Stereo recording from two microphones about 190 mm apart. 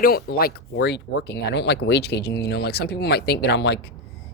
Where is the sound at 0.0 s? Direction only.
55° left (ahead or behind).